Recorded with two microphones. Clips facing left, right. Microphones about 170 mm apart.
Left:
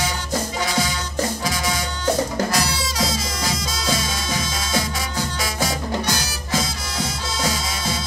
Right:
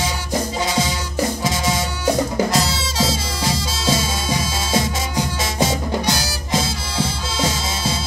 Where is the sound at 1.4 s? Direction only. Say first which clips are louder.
Right 3 dB; 25° right (ahead or behind).